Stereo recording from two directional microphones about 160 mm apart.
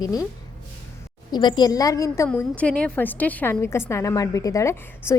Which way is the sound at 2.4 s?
10° left (ahead or behind).